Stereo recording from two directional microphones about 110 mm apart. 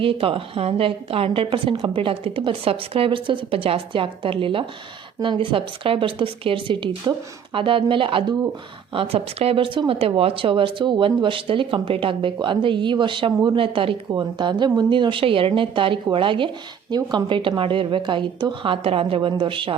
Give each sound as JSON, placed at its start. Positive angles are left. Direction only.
{"t": 0.0, "sound": "a woman's voice", "side_deg": -55}